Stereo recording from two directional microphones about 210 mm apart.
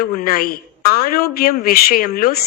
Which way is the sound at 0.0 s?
45° left (ahead or behind).